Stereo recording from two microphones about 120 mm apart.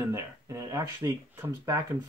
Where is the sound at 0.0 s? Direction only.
25° right (ahead or behind).